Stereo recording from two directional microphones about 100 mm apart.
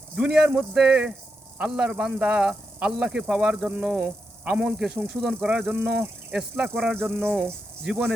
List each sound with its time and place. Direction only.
0.2 s a man's voice: 10° right (ahead or behind)
6.3 s a man's voice: 5° right (ahead or behind)
6.9 s a man's voice: 20° right (ahead or behind)